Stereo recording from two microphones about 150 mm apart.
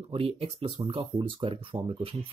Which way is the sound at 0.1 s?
40° right (ahead or behind).